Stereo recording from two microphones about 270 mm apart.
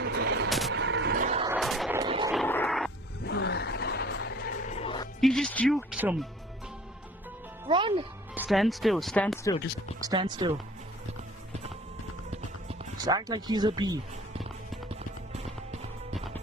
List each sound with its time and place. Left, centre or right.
0.0 s vehicle: right
0.7 s a sound: right
1.5 s vehicle: centre
2.0 s vehicle: centre
2.3 s a sound: centre
3.2 s music: left
4.7 s music: left
5.2 s speech: centre
7.6 s music: centre
8.4 s speech: centre
10.0 s speech: centre
12.3 s music: centre
16.1 s music: centre